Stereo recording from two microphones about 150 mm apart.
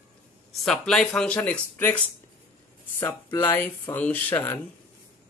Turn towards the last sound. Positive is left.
turn(degrees=15)  # may be behind; listen again after turning